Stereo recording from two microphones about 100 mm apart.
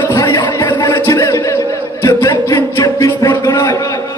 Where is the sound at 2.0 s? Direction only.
35° left (ahead or behind).